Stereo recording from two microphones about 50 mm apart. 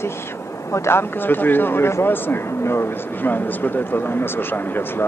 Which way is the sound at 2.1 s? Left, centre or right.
Left.